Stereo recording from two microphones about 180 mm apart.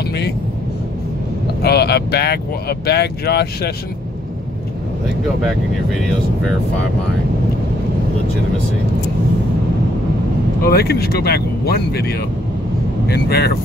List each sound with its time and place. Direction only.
1.6 s speech: 65° left (ahead or behind)
5.9 s speech: centre (ahead or behind)
10.6 s speech: 60° left (ahead or behind)